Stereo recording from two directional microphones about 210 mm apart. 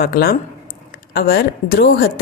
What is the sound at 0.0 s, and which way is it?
Speech, 45° left (ahead or behind).